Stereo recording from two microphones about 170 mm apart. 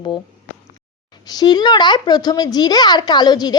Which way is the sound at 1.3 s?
25° left (ahead or behind).